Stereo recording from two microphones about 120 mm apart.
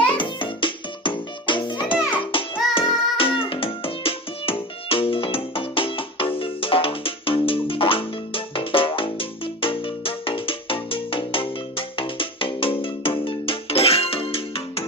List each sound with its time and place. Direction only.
0.1 s music: 45° left (ahead or behind)